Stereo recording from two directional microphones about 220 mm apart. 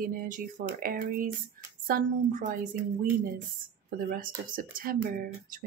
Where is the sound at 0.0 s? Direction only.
40° right (ahead or behind).